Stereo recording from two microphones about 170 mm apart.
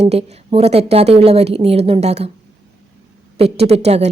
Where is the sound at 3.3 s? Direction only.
35° right (ahead or behind).